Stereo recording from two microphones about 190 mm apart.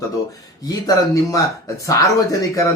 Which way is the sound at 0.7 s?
15° left (ahead or behind).